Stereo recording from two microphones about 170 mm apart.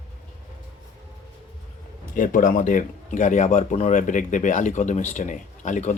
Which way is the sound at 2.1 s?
50° left (ahead or behind).